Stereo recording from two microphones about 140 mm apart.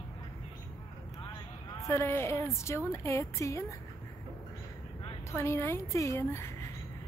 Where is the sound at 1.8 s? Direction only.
20° left (ahead or behind).